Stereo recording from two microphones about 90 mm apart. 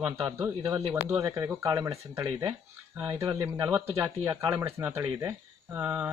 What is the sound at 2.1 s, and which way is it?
A man's voice, 30° right (ahead or behind).